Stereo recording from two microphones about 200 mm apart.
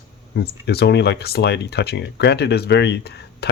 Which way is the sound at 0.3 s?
55° left (ahead or behind).